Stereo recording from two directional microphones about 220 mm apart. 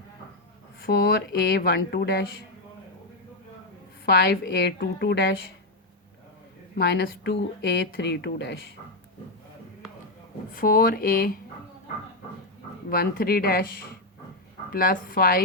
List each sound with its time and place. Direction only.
0.8 s speech: 45° left (ahead or behind)
4.0 s speech: 45° left (ahead or behind)
6.7 s speech: 45° left (ahead or behind)
10.5 s speech: 40° left (ahead or behind)
12.9 s speech: 40° left (ahead or behind)